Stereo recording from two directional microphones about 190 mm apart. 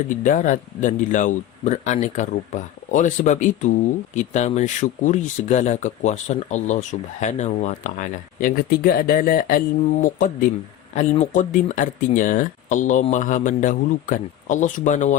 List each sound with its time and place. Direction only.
0.2 s speech: 45° left (ahead or behind)